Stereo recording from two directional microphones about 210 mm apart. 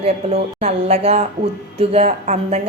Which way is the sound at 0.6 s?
30° right (ahead or behind).